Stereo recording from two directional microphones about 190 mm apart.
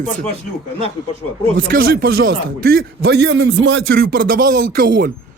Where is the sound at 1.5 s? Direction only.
50° right (ahead or behind).